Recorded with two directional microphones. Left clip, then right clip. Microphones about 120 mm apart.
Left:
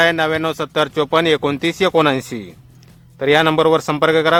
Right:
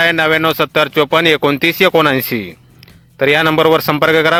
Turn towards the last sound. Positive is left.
turn(degrees=-35)  # may be behind; listen again after turning